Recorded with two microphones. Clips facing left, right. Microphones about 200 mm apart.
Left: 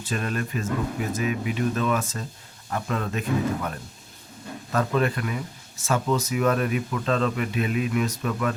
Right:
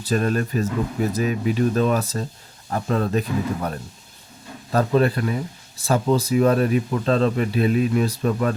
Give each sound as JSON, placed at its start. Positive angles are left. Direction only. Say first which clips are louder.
{"t": 0.0, "sound": "speech", "louder": "right 7 dB", "side_deg": -40}